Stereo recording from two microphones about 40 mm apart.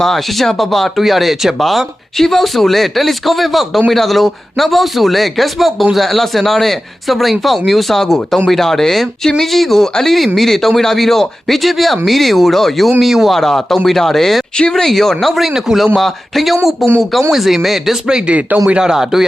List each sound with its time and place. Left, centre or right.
0.0 s speech: centre
1.6 s speech: centre
13.4 s speech: centre
15.5 s speech: centre
16.0 s speech: centre
18.3 s speech: right
18.8 s speech: centre